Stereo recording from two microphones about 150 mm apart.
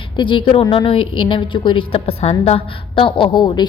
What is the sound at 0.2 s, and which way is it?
A woman's voice, 35° left (ahead or behind).